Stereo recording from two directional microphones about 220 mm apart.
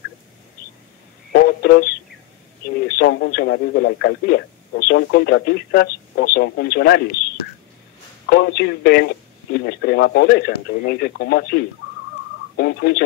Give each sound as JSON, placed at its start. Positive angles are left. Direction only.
{"t": 1.3, "sound": "a sound", "side_deg": 45}
{"t": 3.0, "sound": "speech", "side_deg": 50}
{"t": 8.3, "sound": "speech", "side_deg": 50}